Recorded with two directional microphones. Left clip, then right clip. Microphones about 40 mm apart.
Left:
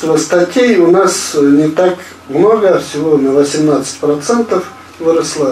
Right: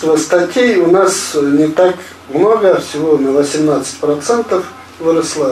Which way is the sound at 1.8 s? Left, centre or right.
Centre.